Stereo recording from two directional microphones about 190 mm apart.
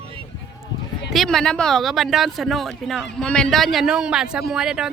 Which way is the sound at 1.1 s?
Centre (ahead or behind).